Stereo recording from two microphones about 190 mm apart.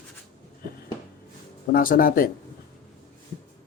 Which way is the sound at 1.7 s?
50° left (ahead or behind).